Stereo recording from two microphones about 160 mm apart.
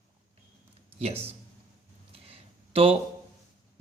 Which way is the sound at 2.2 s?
35° right (ahead or behind).